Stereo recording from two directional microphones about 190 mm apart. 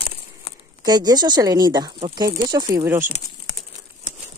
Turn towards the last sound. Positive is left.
turn(degrees=-10)  # may be behind; listen again after turning